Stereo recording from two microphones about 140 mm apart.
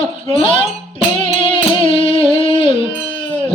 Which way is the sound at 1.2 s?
40° left (ahead or behind).